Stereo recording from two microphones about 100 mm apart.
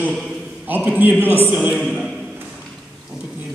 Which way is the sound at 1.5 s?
5° right (ahead or behind).